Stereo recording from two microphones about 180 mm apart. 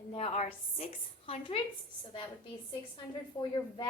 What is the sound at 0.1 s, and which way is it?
A woman's voice, 35° left (ahead or behind).